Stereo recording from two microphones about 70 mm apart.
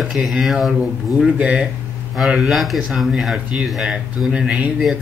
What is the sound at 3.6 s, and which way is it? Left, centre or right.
Speech, centre.